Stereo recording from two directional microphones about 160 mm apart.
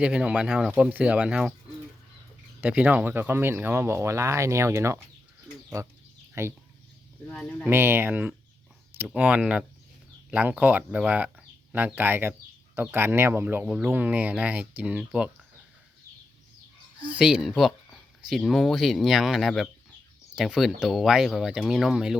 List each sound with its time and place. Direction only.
0.0 s speech: 5° right (ahead or behind)
2.6 s speech: 10° right (ahead or behind)
6.4 s speech: 15° right (ahead or behind)
7.7 s speech: 15° right (ahead or behind)
17.1 s speech: 5° right (ahead or behind)